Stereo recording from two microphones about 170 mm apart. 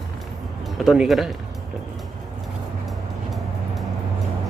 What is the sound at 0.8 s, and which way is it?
Speech, centre (ahead or behind).